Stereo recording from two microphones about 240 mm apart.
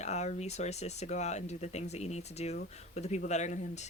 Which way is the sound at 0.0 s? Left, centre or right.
Left.